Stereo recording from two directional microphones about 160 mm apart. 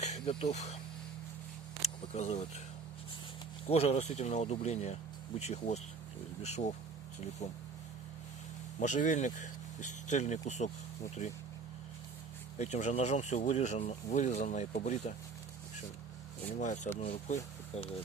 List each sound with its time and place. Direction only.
0.0 s speech: 40° left (ahead or behind)
1.8 s single-lens reflex camera: 45° left (ahead or behind)
3.7 s speech: 40° left (ahead or behind)
8.8 s speech: 50° left (ahead or behind)
12.5 s speech: 45° left (ahead or behind)
16.6 s speech: 50° left (ahead or behind)